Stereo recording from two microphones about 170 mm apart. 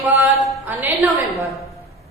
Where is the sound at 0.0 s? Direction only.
Centre (ahead or behind).